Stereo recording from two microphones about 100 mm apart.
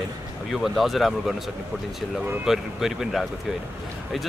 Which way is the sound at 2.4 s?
5° right (ahead or behind).